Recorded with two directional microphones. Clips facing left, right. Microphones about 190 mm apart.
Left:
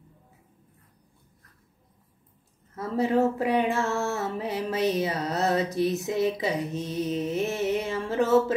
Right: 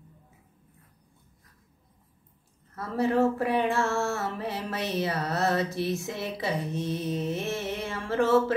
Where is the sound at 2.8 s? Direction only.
20° left (ahead or behind).